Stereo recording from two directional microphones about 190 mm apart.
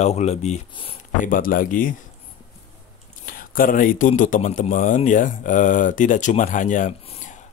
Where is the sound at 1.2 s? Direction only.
45° left (ahead or behind).